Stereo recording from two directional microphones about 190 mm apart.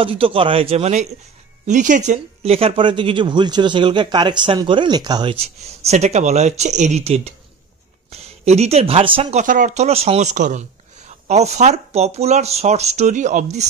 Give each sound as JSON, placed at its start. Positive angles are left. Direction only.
{"t": 0.0, "sound": "speech", "side_deg": -30}